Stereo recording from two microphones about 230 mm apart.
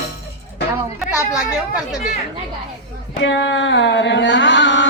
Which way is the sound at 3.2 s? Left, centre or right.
Left.